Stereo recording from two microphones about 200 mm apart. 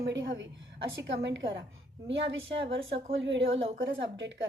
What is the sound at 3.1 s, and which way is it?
A woman's voice, 65° right (ahead or behind).